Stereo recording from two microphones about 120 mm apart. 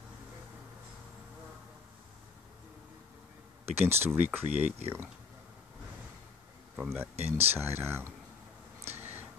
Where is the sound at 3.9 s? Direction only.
20° right (ahead or behind).